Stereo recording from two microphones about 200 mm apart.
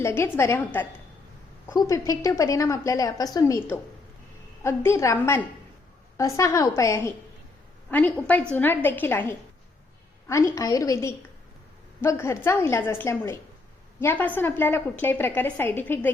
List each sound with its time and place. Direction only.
0.0 s a woman's voice: 15° left (ahead or behind)